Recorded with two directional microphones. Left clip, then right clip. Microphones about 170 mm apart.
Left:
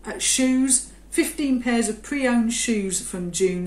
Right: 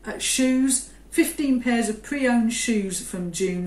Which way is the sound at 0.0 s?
15° left (ahead or behind).